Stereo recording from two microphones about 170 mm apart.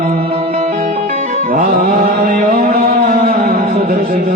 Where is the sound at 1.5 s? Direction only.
50° right (ahead or behind).